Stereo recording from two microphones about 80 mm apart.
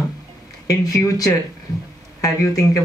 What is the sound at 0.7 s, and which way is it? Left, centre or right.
Speech, left.